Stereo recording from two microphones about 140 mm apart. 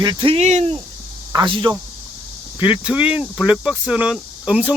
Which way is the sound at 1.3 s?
30° right (ahead or behind).